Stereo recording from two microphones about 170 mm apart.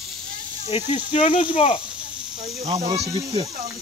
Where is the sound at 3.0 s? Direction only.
25° right (ahead or behind).